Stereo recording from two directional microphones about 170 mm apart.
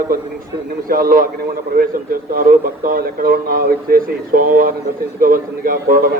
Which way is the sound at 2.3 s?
55° right (ahead or behind).